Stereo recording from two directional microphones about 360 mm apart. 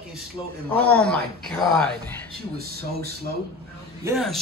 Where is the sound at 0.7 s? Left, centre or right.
Centre.